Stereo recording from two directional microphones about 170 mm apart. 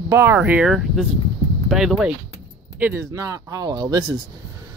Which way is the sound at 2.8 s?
15° right (ahead or behind).